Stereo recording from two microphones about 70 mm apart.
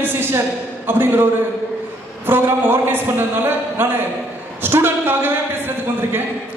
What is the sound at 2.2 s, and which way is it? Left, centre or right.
A man's voice, right.